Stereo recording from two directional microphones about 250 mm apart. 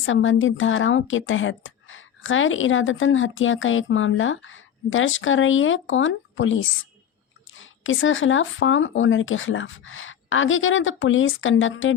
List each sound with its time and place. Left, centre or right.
0.0 s speech: left